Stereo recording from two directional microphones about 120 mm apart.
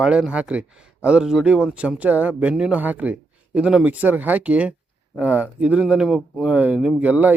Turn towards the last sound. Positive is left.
turn(degrees=-10)  # may be behind; listen again after turning